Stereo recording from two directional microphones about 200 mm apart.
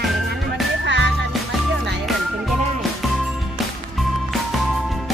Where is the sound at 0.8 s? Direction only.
60° right (ahead or behind).